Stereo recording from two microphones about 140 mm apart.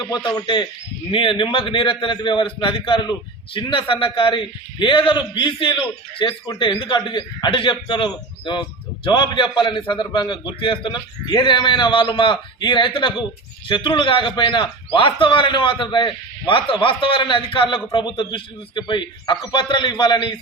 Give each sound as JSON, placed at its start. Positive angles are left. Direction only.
{"t": 0.0, "sound": "a man's voice", "side_deg": 30}